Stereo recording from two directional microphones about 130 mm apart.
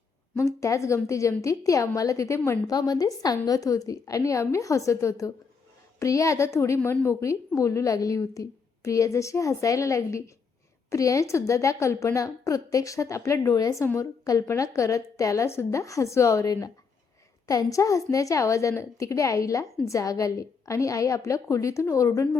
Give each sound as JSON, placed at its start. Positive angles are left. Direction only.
{"t": 0.6, "sound": "a woman's voice", "side_deg": 25}